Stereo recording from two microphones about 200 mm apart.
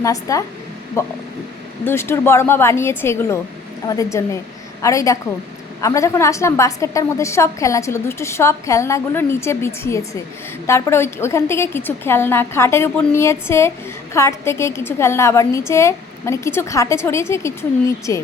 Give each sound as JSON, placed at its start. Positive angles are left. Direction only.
{"t": 0.0, "sound": "a woman's voice", "side_deg": 15}